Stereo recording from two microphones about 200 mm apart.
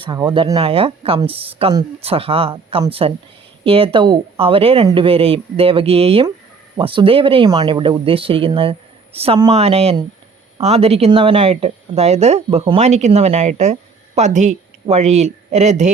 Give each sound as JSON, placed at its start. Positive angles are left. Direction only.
{"t": 0.0, "sound": "speech", "side_deg": -20}